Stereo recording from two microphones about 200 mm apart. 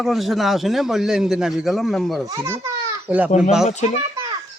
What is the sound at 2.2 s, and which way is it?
A child's voice, 15° right (ahead or behind).